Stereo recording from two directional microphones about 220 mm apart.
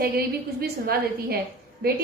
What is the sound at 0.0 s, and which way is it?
A woman's voice, 45° right (ahead or behind).